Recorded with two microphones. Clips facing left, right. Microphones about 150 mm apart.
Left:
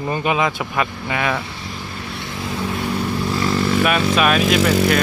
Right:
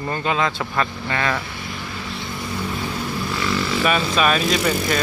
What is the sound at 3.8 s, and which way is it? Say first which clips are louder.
Speech: right 2 dB; 5° left (ahead or behind).